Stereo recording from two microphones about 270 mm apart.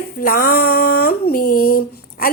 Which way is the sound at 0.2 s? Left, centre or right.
Left.